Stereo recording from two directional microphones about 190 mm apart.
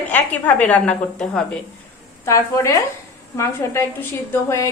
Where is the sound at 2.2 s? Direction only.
15° left (ahead or behind).